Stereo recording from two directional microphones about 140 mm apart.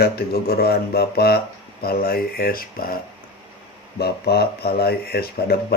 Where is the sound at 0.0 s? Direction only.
90° left.